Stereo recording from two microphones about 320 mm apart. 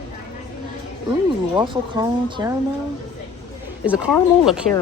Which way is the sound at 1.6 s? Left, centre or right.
Centre.